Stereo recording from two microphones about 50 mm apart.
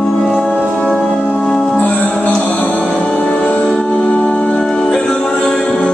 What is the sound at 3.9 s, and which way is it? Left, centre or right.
Music, left.